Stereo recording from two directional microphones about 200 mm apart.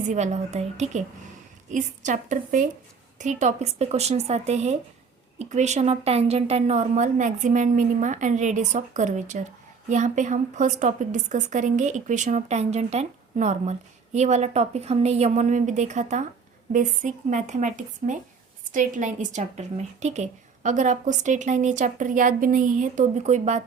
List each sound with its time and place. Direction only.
0.1 s a woman's voice: 35° right (ahead or behind)